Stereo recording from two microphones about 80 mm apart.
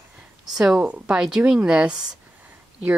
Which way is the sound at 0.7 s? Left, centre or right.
Centre.